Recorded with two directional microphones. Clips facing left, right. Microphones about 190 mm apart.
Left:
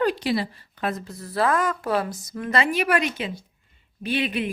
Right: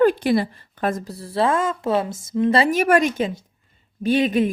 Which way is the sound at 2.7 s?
45° right (ahead or behind).